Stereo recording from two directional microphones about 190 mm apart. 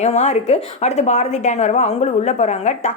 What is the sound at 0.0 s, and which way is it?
A woman's voice, 35° left (ahead or behind).